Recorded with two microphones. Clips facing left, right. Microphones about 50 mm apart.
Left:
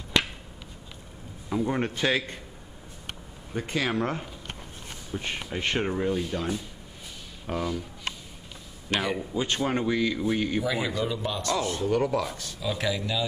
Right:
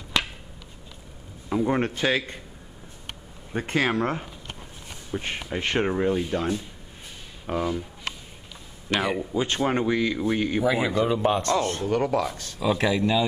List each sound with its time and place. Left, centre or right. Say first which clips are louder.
1.5 s a sound: right 4 dB; centre
1.9 s speech: right 2 dB; centre
3.5 s speech: right 4 dB; right
5.1 s speech: right 3 dB; centre
9.0 s speech: right 3 dB; centre; by 11.9 s right
11.9 s speech: right 2 dB; centre
12.4 s speech: right 6 dB; right